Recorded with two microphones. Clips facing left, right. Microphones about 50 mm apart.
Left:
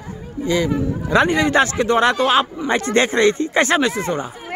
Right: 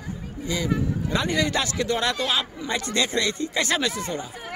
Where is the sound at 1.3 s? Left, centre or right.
Left.